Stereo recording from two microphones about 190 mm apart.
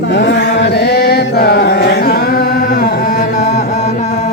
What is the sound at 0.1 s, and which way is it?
Chant, 65° left (ahead or behind).